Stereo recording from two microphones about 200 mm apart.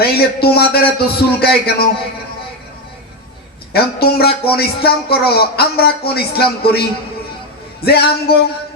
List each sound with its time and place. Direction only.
0.0 s a man's voice: 50° left (ahead or behind)
3.7 s a man's voice: 50° left (ahead or behind)